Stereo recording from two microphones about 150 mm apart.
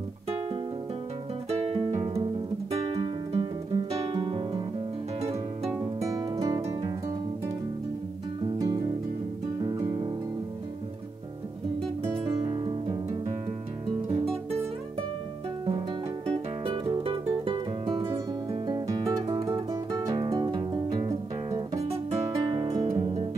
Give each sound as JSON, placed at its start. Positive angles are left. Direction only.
{"t": 1.5, "sound": "music", "side_deg": -40}
{"t": 2.7, "sound": "guitar", "side_deg": -40}
{"t": 5.2, "sound": "harp", "side_deg": -45}
{"t": 6.0, "sound": "music", "side_deg": -25}
{"t": 8.5, "sound": "music", "side_deg": -20}
{"t": 12.0, "sound": "music", "side_deg": -30}
{"t": 14.0, "sound": "guitar", "side_deg": -40}
{"t": 16.3, "sound": "music", "side_deg": -35}